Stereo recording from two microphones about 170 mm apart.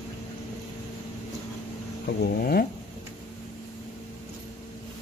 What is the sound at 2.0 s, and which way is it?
Speech, 60° left (ahead or behind).